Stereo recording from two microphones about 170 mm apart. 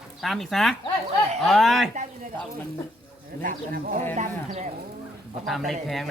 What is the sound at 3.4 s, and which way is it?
Speech, 55° right (ahead or behind).